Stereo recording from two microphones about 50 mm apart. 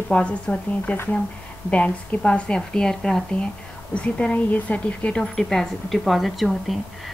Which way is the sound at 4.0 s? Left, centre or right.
Left.